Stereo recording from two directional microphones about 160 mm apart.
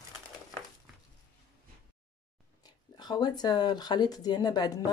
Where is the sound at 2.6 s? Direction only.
25° left (ahead or behind).